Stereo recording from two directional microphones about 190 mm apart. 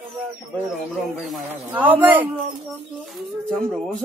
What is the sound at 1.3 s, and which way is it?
Speech, 10° right (ahead or behind).